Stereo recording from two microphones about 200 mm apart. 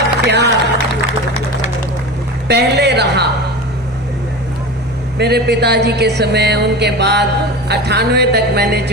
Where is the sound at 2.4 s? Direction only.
55° right (ahead or behind).